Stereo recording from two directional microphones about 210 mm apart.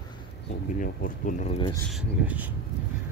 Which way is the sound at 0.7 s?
40° left (ahead or behind).